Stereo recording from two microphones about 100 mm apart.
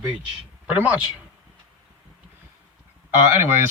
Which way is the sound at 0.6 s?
15° right (ahead or behind).